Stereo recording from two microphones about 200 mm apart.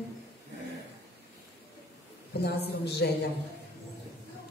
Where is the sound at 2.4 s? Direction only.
55° left (ahead or behind).